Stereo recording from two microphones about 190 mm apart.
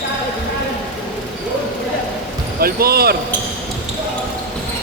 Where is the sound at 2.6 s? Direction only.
50° right (ahead or behind).